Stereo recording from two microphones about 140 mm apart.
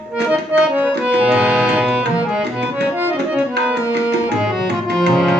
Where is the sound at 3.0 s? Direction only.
10° right (ahead or behind).